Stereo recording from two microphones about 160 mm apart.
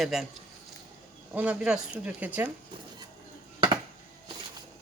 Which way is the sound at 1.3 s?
10° right (ahead or behind).